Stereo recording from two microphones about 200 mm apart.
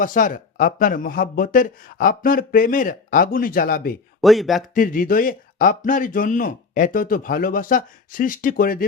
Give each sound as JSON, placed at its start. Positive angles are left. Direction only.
{"t": 0.0, "sound": "speech", "side_deg": 40}
{"t": 4.2, "sound": "speech", "side_deg": 0}
{"t": 4.7, "sound": "speech", "side_deg": 45}